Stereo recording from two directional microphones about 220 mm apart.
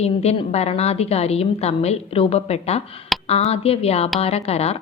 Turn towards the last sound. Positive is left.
turn(degrees=30)  # may be behind; listen again after turning